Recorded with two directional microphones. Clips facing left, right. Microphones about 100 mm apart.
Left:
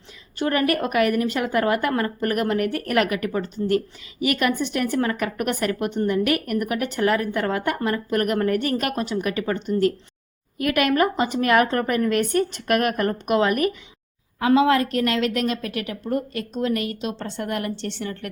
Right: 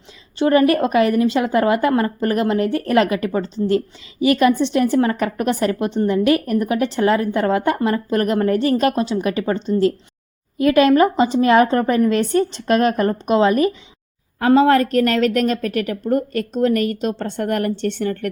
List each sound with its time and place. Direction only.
0.3 s a woman's voice: 25° right (ahead or behind)
14.4 s a woman's voice: 40° right (ahead or behind)